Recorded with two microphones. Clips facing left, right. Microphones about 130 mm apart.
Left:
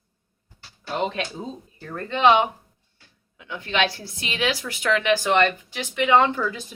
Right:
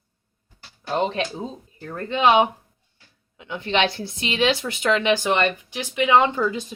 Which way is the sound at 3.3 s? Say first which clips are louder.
Right 2 dB; 25° right (ahead or behind).